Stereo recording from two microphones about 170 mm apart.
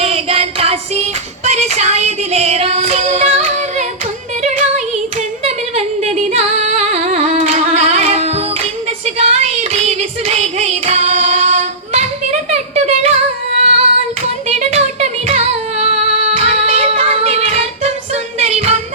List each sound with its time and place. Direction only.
0.0 s child singing: 35° right (ahead or behind)
1.5 s music: 40° right (ahead or behind)
5.4 s singing: 40° right (ahead or behind)
9.0 s child singing: 40° right (ahead or behind)
13.6 s female singing: 40° right (ahead or behind)
14.4 s music: 40° right (ahead or behind)